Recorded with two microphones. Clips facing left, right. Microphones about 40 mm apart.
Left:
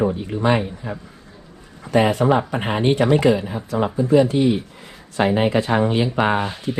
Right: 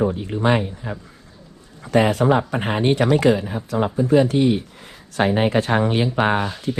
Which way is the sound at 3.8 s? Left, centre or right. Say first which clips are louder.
Even; left.